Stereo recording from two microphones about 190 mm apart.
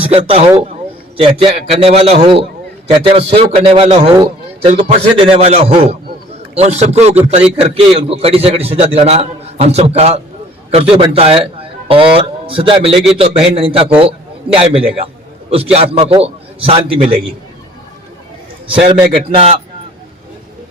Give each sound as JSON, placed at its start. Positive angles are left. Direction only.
{"t": 0.0, "sound": "a man's voice", "side_deg": -30}
{"t": 18.7, "sound": "a man's voice", "side_deg": -25}